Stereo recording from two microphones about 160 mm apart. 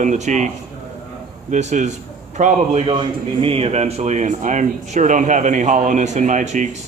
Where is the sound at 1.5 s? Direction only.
50° right (ahead or behind).